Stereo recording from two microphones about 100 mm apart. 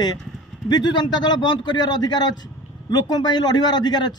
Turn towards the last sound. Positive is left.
turn(degrees=45)  # may be behind; listen again after turning